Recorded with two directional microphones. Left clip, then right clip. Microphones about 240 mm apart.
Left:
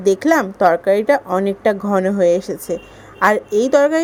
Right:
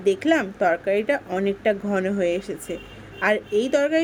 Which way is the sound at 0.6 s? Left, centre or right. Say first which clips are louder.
Left 8 dB; centre.